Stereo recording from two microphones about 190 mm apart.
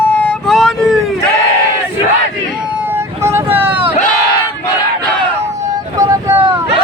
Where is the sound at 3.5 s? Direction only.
10° right (ahead or behind).